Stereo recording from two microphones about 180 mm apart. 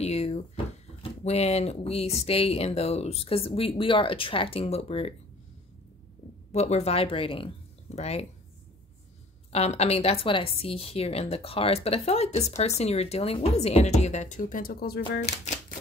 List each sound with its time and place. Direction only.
0.0 s a woman's voice: 35° left (ahead or behind)
6.5 s speech: 35° left (ahead or behind)
9.5 s a woman's voice: 35° left (ahead or behind); by 15.0 s 60° left (ahead or behind)
15.1 s a woman's voice: 40° left (ahead or behind)